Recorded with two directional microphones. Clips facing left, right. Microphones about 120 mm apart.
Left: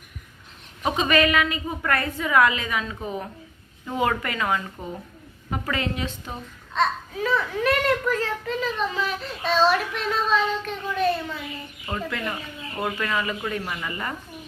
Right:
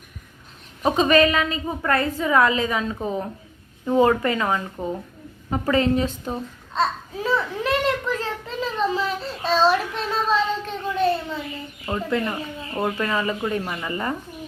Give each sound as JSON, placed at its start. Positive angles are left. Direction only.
{"t": 0.8, "sound": "a woman's voice", "side_deg": -35}
{"t": 12.2, "sound": "speech", "side_deg": -15}
{"t": 13.0, "sound": "speech", "side_deg": -30}